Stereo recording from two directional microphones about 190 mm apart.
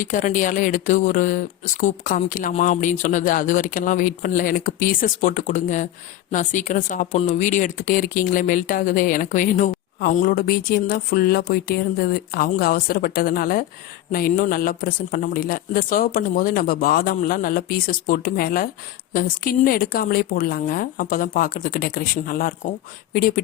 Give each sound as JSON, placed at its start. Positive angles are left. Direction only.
{"t": 0.0, "sound": "speech", "side_deg": 40}